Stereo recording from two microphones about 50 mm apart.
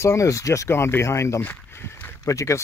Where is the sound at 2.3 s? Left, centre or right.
Left.